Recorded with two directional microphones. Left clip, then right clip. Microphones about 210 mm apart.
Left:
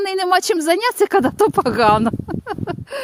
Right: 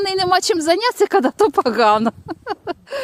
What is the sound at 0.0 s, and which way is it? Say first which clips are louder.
Speech: even; centre (ahead or behind).